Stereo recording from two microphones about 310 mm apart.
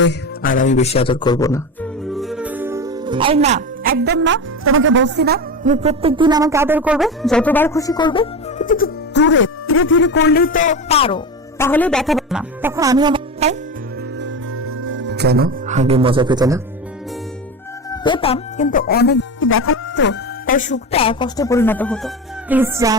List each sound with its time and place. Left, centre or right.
0.0 s speech: left; by 13.6 s centre
14.2 s music: right; by 16.6 s centre
17.9 s speech: centre